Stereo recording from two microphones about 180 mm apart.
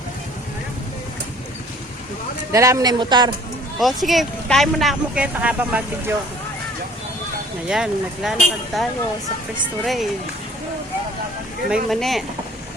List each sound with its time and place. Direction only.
2.5 s a man's voice: 15° right (ahead or behind)
3.8 s speech: centre (ahead or behind)
7.7 s speech: 5° right (ahead or behind)
11.7 s speech: centre (ahead or behind)